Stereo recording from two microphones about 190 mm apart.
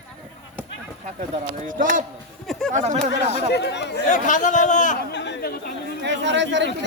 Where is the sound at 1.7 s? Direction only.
45° right (ahead or behind).